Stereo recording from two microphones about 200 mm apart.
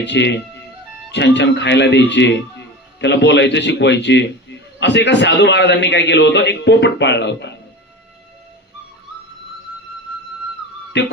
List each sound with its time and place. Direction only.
0.0 s a man's voice: 60° left (ahead or behind)
11.0 s speech: 60° left (ahead or behind)